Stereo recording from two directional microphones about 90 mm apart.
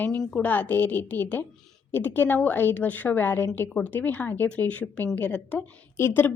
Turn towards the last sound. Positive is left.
turn(degrees=25)  # may be behind; listen again after turning